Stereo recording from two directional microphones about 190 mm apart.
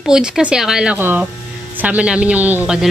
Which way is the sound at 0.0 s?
5° right (ahead or behind).